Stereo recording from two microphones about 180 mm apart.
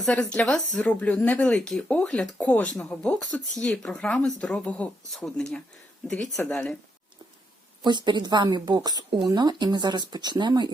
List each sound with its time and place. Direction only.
0.0 s speech: 5° left (ahead or behind)
7.9 s speech: 25° right (ahead or behind)